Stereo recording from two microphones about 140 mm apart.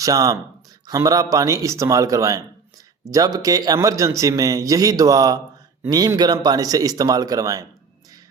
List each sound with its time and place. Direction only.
0.0 s speech: 25° right (ahead or behind)